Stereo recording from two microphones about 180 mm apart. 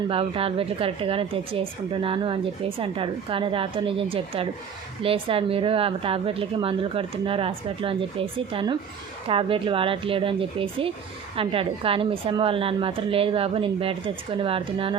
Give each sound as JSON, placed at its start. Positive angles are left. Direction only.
{"t": 0.1, "sound": "a woman's voice", "side_deg": -30}